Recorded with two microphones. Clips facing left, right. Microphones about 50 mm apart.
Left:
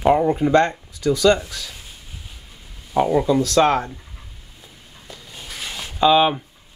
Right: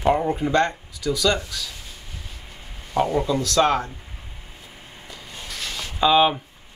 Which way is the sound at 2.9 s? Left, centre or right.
Centre.